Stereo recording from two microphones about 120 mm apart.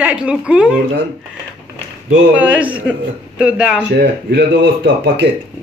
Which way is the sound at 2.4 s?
10° right (ahead or behind).